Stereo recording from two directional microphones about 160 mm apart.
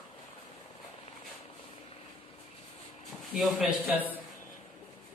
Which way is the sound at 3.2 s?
Centre (ahead or behind).